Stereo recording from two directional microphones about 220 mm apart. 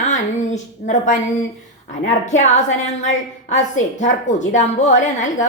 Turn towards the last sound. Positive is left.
turn(degrees=35)  # may be behind; listen again after turning